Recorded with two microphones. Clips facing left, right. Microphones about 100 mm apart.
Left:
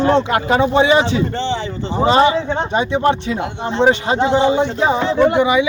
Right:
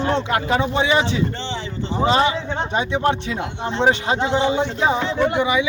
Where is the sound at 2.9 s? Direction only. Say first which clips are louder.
Left 4 dB; 45° left (ahead or behind).